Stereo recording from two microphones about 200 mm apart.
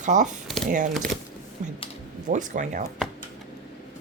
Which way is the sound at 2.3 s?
40° right (ahead or behind).